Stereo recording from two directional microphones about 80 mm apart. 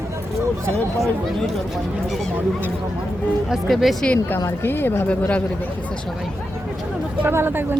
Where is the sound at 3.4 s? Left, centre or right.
Centre.